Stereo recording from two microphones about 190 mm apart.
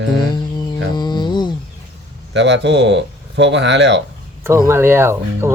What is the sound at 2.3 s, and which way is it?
Speech, 70° right (ahead or behind).